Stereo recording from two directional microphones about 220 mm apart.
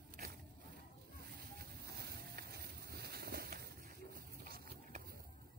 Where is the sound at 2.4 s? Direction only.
45° right (ahead or behind).